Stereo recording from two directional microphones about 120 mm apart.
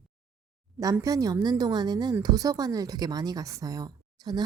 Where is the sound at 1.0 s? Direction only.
30° right (ahead or behind).